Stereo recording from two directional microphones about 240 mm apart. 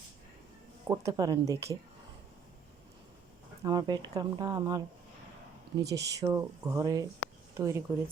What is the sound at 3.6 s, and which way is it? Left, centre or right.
Speech, centre.